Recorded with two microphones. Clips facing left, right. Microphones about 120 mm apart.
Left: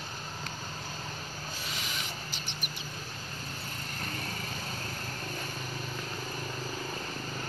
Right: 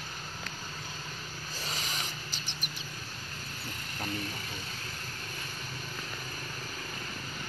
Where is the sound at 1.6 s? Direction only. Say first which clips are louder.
Right 3 dB; 40° right (ahead or behind).